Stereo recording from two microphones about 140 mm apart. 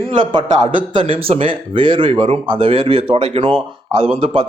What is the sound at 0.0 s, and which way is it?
A man's voice, 35° right (ahead or behind).